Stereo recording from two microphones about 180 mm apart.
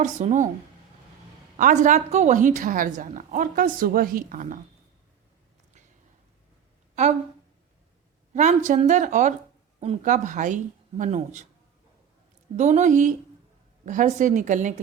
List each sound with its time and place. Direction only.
0.0 s speech: 40° right (ahead or behind)
1.5 s a woman's voice: 45° right (ahead or behind)
8.3 s a woman's voice: 45° right (ahead or behind)
12.5 s a woman's voice: 40° right (ahead or behind)